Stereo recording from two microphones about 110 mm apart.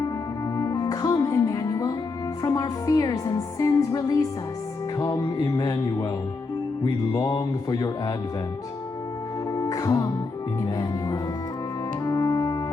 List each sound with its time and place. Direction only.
0.5 s music: 35° left (ahead or behind)
2.4 s speech: 35° left (ahead or behind)
7.1 s speech: 35° left (ahead or behind)
9.5 s music: 35° left (ahead or behind)